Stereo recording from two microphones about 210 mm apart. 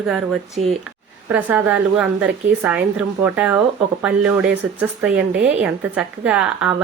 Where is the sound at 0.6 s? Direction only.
35° right (ahead or behind).